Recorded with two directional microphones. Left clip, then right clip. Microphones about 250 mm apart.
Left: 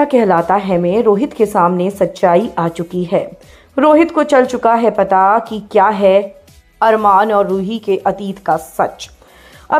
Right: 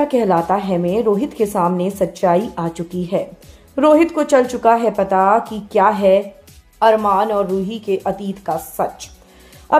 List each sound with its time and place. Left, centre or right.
0.0 s a woman's voice: centre
9.7 s music: centre